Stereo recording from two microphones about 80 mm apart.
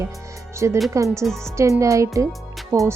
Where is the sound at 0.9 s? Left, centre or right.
Right.